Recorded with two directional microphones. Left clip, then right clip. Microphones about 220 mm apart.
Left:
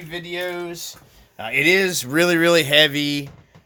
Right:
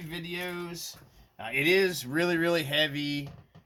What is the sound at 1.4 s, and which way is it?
Speech, 55° left (ahead or behind).